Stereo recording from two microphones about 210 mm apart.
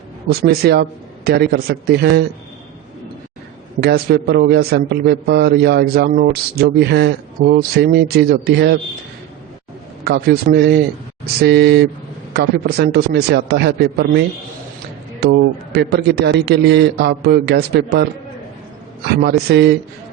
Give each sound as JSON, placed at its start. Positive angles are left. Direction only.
{"t": 0.3, "sound": "a man's voice", "side_deg": -50}
{"t": 3.8, "sound": "a man's voice", "side_deg": -50}
{"t": 10.0, "sound": "a man's voice", "side_deg": -45}
{"t": 19.0, "sound": "a man's voice", "side_deg": -50}